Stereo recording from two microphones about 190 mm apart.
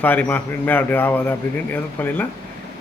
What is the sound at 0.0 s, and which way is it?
A man's voice, 10° left (ahead or behind).